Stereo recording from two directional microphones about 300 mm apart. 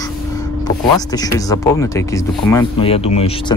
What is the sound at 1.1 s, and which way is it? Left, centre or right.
Speech, centre.